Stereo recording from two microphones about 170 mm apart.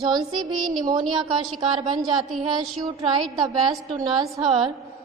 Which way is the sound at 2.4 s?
25° right (ahead or behind).